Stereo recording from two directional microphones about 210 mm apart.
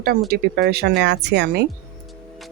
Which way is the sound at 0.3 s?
50° right (ahead or behind).